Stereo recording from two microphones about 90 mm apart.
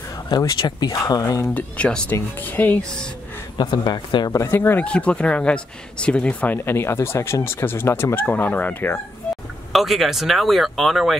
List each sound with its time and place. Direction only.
0.6 s speech: 55° left (ahead or behind)
1.5 s speech: 10° left (ahead or behind)
3.5 s speech: 50° left (ahead or behind)
4.5 s speech: 25° left (ahead or behind)
4.8 s speech: 10° left (ahead or behind)
9.7 s speech: centre (ahead or behind)